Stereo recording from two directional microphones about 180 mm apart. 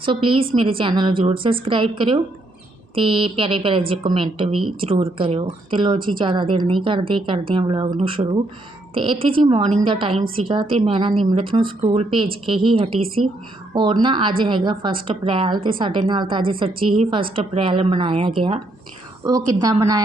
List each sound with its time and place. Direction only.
0.0 s a woman's voice: 30° right (ahead or behind)